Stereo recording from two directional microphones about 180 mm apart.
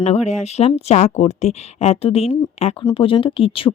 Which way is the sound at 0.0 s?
35° left (ahead or behind).